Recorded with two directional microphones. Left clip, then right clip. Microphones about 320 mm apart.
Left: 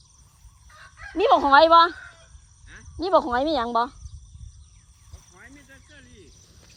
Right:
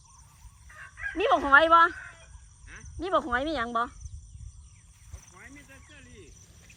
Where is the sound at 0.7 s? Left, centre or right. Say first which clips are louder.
Right 5 dB; left.